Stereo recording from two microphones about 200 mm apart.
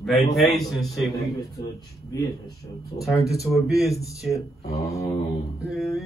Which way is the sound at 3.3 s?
Centre (ahead or behind).